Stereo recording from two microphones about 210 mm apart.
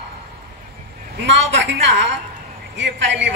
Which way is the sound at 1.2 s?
60° right (ahead or behind).